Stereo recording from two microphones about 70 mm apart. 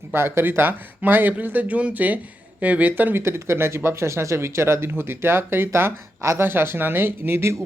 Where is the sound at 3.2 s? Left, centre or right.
Right.